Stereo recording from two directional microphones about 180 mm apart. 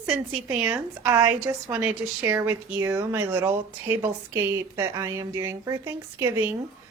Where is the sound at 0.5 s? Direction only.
5° right (ahead or behind).